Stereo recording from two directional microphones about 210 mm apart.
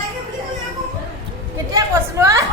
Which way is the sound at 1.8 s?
15° right (ahead or behind).